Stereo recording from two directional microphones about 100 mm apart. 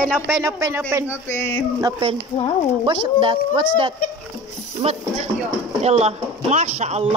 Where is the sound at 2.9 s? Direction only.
50° right (ahead or behind).